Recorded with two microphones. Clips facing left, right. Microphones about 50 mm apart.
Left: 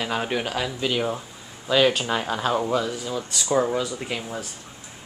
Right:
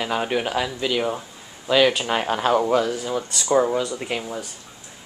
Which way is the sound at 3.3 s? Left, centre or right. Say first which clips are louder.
Right 3 dB; centre.